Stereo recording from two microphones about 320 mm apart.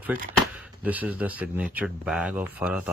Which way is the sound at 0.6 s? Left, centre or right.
Centre.